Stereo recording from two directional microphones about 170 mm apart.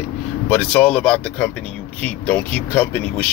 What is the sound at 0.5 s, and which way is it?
Speech, 5° left (ahead or behind).